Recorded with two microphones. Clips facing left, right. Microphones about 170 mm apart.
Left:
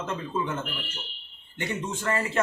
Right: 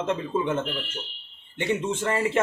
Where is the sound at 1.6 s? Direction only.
25° right (ahead or behind).